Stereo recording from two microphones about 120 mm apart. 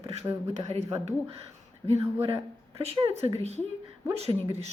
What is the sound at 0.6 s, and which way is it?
Speech, 65° right (ahead or behind).